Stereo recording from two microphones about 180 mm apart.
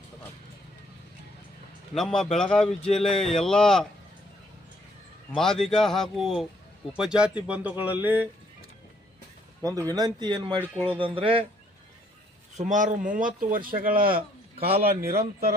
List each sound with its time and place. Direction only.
2.0 s speech: 5° left (ahead or behind)
5.4 s speech: centre (ahead or behind)
9.9 s speech: 20° right (ahead or behind)
10.6 s speech: 10° left (ahead or behind)
10.9 s speech: 30° right (ahead or behind)
12.5 s a man's voice: 45° right (ahead or behind)